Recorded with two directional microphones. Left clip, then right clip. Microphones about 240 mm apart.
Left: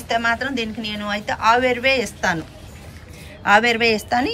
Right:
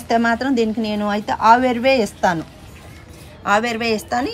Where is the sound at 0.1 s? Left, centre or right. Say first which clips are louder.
Right 3 dB; centre.